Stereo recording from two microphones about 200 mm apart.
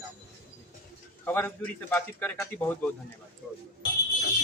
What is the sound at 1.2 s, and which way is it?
Speech, 10° left (ahead or behind).